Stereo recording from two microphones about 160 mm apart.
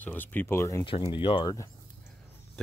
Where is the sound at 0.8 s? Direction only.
30° left (ahead or behind).